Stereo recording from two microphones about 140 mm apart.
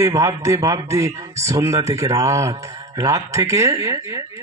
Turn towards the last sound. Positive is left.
turn(degrees=-25)  # may be behind; listen again after turning